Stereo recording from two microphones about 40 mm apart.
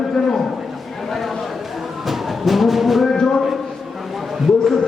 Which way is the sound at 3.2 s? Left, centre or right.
Centre.